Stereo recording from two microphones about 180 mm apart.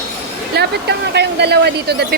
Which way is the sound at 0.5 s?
70° right (ahead or behind).